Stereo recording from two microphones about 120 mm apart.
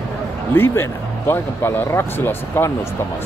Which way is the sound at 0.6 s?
20° left (ahead or behind).